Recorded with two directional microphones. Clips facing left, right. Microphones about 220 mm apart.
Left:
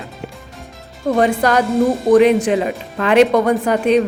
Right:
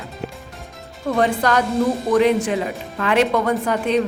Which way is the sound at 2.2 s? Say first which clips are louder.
Left 4 dB; 15° left (ahead or behind).